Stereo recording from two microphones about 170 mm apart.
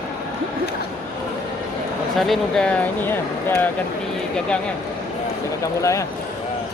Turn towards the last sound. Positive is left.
turn(degrees=20)  # may be behind; listen again after turning